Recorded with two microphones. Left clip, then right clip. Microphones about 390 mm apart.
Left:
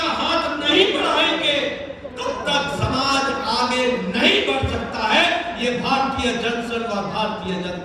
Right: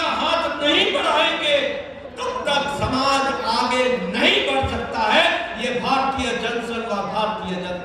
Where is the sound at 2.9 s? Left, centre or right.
Right.